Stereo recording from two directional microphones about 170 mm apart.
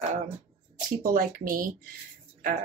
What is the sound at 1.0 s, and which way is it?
Speech, 55° right (ahead or behind).